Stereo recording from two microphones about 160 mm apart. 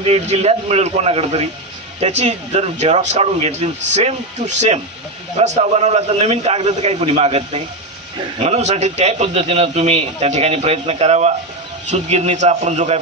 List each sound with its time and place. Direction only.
0.0 s a man's voice: 40° right (ahead or behind)